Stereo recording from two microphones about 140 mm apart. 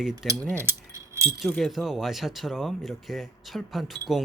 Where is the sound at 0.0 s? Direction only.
Centre (ahead or behind).